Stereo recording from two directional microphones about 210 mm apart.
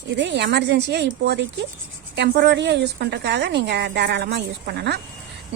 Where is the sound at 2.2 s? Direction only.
50° right (ahead or behind).